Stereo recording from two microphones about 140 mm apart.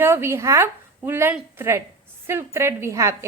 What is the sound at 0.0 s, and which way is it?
A woman's voice, 15° right (ahead or behind).